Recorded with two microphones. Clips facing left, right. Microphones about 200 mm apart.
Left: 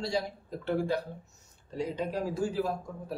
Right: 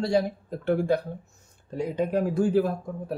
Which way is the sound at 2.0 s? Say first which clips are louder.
Right 9 dB; 55° right (ahead or behind).